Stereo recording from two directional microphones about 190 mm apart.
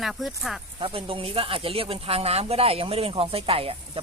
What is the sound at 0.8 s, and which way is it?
Speech, 30° right (ahead or behind).